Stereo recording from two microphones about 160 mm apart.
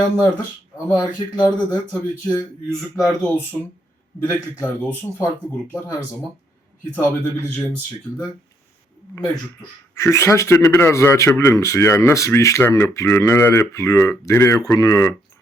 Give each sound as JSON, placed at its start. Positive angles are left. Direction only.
{"t": 0.9, "sound": "speech", "side_deg": 25}
{"t": 2.6, "sound": "speech", "side_deg": 0}
{"t": 4.2, "sound": "speech", "side_deg": 10}
{"t": 6.9, "sound": "speech", "side_deg": 10}
{"t": 9.1, "sound": "speech", "side_deg": 20}